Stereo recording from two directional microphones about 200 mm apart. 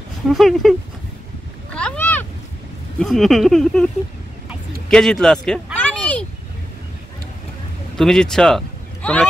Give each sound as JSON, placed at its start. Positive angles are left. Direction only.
{"t": 0.3, "sound": "speech", "side_deg": 0}
{"t": 1.7, "sound": "a sound", "side_deg": 5}
{"t": 3.0, "sound": "speech", "side_deg": 0}
{"t": 4.8, "sound": "vehicle", "side_deg": 5}
{"t": 8.0, "sound": "speech", "side_deg": 5}